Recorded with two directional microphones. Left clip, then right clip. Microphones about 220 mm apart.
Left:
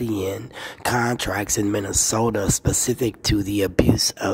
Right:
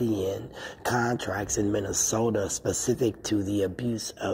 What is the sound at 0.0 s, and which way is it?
Speech, 20° left (ahead or behind).